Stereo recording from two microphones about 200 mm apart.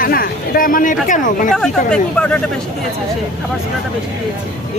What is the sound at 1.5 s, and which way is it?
Speech, 5° left (ahead or behind).